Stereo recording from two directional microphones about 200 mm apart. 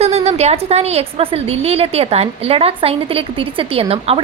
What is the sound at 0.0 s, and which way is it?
A woman's voice, 30° right (ahead or behind).